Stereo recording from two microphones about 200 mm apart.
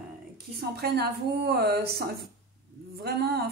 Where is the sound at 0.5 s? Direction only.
50° right (ahead or behind).